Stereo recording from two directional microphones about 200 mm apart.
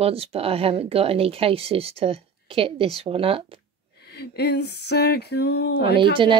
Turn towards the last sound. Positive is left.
turn(degrees=-25)  # may be behind; listen again after turning